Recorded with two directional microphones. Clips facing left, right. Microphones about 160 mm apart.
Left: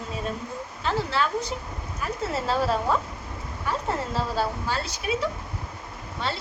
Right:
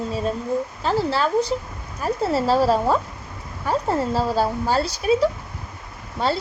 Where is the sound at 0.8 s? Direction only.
35° right (ahead or behind).